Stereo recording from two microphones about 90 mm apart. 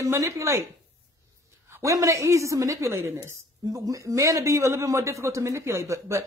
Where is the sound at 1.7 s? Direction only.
35° right (ahead or behind).